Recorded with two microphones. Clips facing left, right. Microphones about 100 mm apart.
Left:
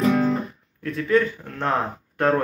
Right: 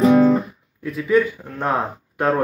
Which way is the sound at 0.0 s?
Centre (ahead or behind).